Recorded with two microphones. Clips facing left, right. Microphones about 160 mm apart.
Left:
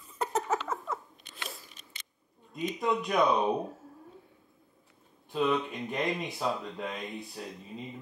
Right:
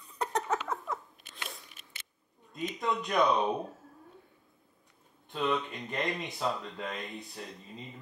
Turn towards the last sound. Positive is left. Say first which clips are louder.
# left 3 dB
turn(degrees=0)  # may be behind; listen again after turning